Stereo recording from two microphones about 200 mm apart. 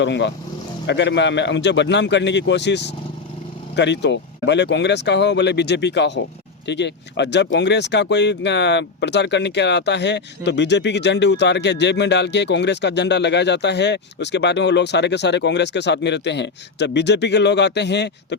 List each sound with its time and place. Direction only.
0.0 s speech: 65° left (ahead or behind)